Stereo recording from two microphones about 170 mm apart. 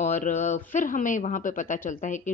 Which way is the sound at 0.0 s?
45° left (ahead or behind).